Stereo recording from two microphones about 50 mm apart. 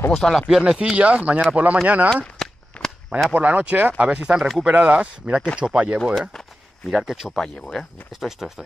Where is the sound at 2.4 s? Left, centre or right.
Centre.